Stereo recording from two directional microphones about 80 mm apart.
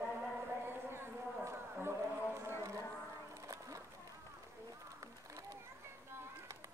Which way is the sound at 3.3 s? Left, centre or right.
Right.